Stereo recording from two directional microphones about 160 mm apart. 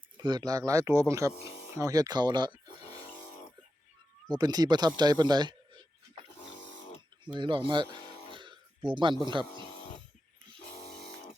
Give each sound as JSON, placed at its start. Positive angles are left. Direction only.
{"t": 0.2, "sound": "speech", "side_deg": -25}
{"t": 4.3, "sound": "speech", "side_deg": -25}
{"t": 7.3, "sound": "speech", "side_deg": -30}
{"t": 8.3, "sound": "a sound", "side_deg": -30}